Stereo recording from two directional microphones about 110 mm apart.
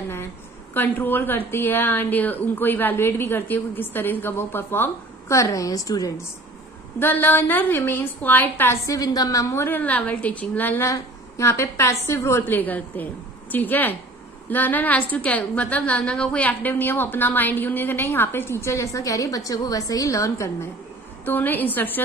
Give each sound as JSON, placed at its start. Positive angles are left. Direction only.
{"t": 0.7, "sound": "a woman's voice", "side_deg": 20}
{"t": 7.0, "sound": "a woman's voice", "side_deg": 20}
{"t": 8.8, "sound": "a woman's voice", "side_deg": 35}